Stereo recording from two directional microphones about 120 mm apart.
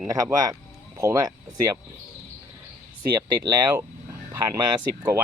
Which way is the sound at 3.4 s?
35° right (ahead or behind).